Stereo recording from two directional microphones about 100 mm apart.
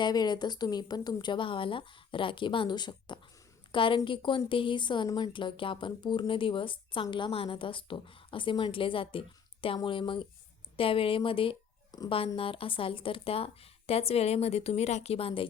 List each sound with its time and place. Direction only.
0.0 s speech: 45° left (ahead or behind); by 15.4 s 65° left (ahead or behind)